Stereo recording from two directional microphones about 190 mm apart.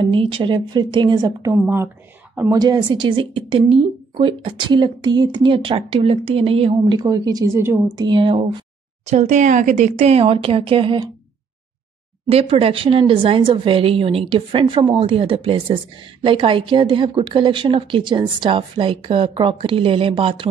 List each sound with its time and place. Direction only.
0.0 s a woman's voice: 30° right (ahead or behind); by 2.6 s 10° right (ahead or behind)
2.6 s speech: 20° right (ahead or behind)
8.1 s speech: 25° right (ahead or behind)
9.0 s speech: 35° right (ahead or behind)
12.3 s speech: 30° right (ahead or behind)